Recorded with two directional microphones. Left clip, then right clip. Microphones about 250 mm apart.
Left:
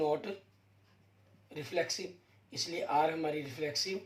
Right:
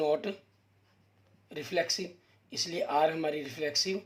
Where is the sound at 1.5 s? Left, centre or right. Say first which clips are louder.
Right 4 dB; right.